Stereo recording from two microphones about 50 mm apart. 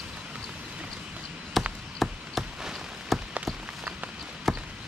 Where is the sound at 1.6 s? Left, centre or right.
Centre.